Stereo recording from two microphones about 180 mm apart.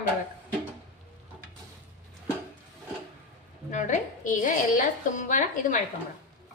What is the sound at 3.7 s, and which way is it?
A woman's voice, 45° left (ahead or behind).